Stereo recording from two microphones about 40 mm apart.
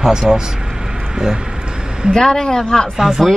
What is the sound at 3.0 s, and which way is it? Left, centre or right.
Speech, centre.